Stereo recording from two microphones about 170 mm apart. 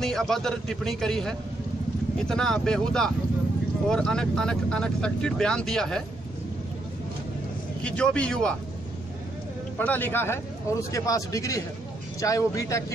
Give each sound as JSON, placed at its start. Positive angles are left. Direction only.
{"t": 0.0, "sound": "speech", "side_deg": 0}
{"t": 7.8, "sound": "speech", "side_deg": 5}
{"t": 9.8, "sound": "speech", "side_deg": 10}